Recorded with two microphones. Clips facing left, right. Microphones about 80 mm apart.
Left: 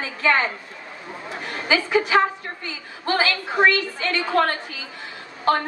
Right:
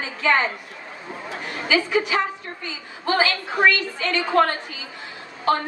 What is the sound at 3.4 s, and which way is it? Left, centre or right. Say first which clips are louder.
Speech: left 3 dB; left.